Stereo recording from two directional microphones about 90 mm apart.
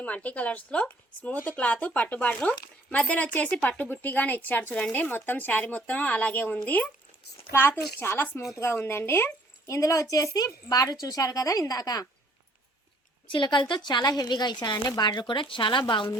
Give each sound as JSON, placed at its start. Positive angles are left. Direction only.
{"t": 0.0, "sound": "speech", "side_deg": 15}
{"t": 7.9, "sound": "a woman's voice", "side_deg": 25}
{"t": 13.2, "sound": "a woman's voice", "side_deg": 65}
{"t": 15.1, "sound": "a woman's voice", "side_deg": 60}